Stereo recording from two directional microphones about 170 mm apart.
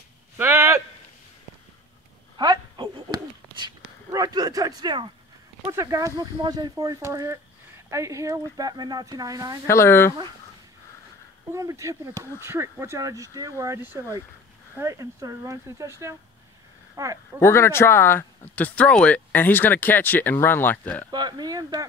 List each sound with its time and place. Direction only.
0.4 s a sound: 15° right (ahead or behind)
2.3 s a sound: 25° right (ahead or behind)
5.7 s speech: 15° right (ahead or behind)
9.7 s speech: 15° left (ahead or behind)
11.5 s speech: 15° right (ahead or behind)
17.4 s speech: 15° left (ahead or behind)
21.1 s speech: 25° right (ahead or behind)